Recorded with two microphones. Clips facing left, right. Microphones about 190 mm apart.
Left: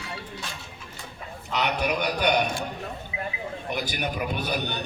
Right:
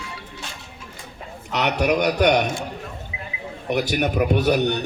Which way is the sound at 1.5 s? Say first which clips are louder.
Right 6 dB; 70° right (ahead or behind).